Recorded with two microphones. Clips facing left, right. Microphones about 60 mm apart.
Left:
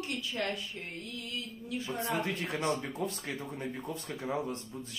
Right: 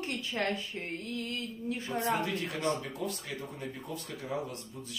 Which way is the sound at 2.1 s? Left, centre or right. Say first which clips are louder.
Even; left.